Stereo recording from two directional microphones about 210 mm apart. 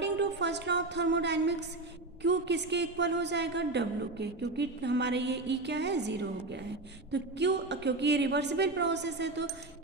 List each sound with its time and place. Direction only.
0.0 s a woman's voice: 55° right (ahead or behind)